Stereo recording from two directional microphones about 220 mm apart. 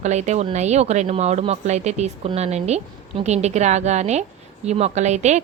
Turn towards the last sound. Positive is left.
turn(degrees=-30)  # may be behind; listen again after turning